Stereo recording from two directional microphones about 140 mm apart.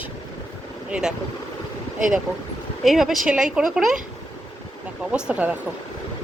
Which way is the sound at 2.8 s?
Centre (ahead or behind).